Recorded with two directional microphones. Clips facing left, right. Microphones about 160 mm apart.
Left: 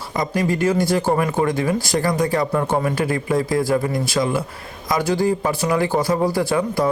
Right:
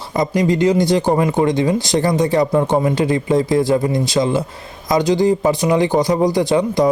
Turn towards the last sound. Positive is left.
turn(degrees=-20)  # may be behind; listen again after turning